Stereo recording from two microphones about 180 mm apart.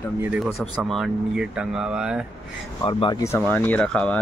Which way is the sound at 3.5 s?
5° left (ahead or behind).